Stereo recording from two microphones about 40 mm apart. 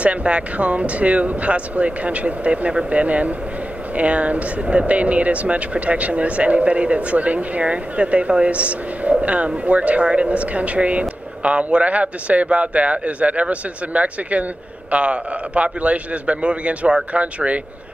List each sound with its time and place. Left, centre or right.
0.0 s speech: right